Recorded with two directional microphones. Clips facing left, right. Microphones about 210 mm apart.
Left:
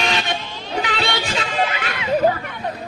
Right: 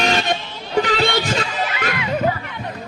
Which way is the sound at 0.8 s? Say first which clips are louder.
Right 6 dB; 45° right (ahead or behind).